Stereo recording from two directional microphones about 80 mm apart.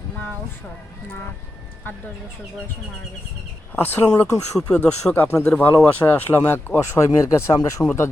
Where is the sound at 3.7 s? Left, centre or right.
Left.